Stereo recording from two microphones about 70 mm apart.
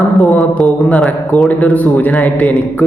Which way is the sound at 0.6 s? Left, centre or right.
Left.